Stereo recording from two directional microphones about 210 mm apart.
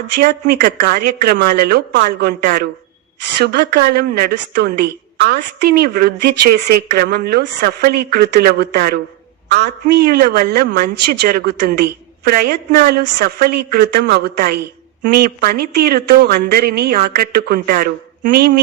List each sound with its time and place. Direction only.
0.2 s a woman's voice: 45° right (ahead or behind)